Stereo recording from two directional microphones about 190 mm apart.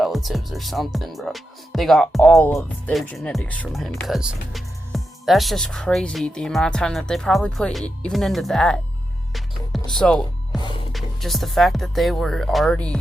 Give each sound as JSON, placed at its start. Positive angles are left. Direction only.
{"t": 0.0, "sound": "speech", "side_deg": 0}